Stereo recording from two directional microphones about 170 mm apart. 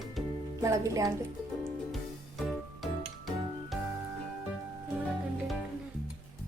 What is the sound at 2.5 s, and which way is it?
Music, centre (ahead or behind).